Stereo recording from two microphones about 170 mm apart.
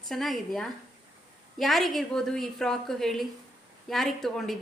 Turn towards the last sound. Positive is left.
turn(degrees=0)  # may be behind; listen again after turning